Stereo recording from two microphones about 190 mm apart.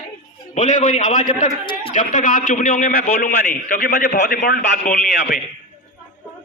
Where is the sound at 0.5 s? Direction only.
40° left (ahead or behind).